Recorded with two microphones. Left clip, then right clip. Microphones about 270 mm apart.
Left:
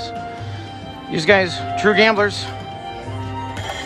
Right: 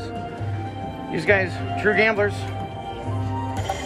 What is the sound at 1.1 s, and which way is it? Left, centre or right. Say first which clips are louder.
Speech: left 5 dB; centre.